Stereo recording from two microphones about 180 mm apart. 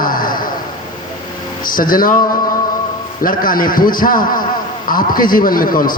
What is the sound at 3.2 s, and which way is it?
A man's voice, 50° left (ahead or behind).